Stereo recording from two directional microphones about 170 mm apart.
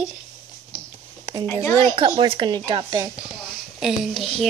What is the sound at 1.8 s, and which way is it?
Speech, 30° right (ahead or behind).